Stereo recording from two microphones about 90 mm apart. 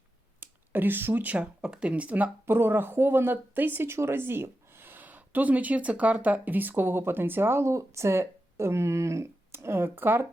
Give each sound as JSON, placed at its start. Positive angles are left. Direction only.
{"t": 0.3, "sound": "speech", "side_deg": -20}